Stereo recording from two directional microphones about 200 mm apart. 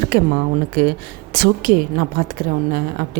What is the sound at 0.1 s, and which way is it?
A woman's voice, 45° right (ahead or behind).